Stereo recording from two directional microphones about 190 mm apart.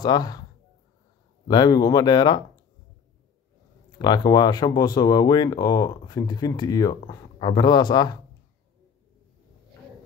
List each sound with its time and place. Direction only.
0.0 s speech: 20° left (ahead or behind)
1.5 s speech: 20° left (ahead or behind)
4.0 s speech: 20° left (ahead or behind)